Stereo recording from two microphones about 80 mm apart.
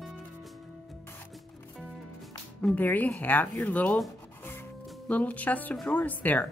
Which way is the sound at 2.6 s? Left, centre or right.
Left.